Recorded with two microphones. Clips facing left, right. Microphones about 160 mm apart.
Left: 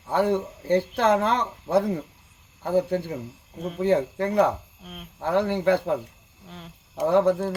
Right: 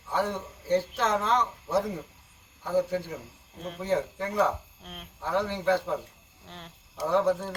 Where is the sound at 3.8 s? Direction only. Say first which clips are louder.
Left 6 dB; 60° left (ahead or behind).